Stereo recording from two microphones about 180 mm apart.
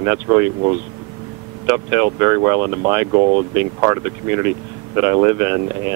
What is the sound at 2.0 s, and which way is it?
Speech, 20° right (ahead or behind).